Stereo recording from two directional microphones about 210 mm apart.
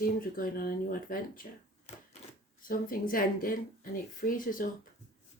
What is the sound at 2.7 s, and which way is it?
Speech, 40° left (ahead or behind).